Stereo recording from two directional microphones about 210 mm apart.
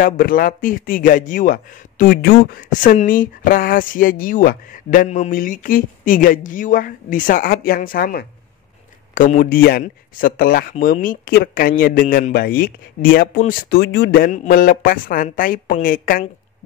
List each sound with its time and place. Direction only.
0.0 s speech: 45° left (ahead or behind)